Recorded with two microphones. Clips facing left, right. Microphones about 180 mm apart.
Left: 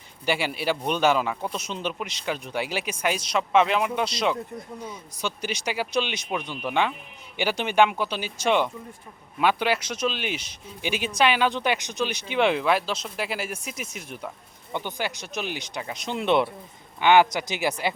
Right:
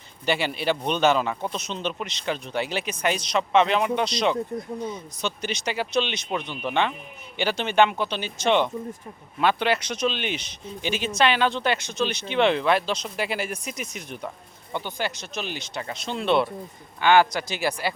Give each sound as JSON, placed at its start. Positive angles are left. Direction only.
{"t": 0.3, "sound": "speech", "side_deg": 10}
{"t": 14.7, "sound": "speech", "side_deg": 15}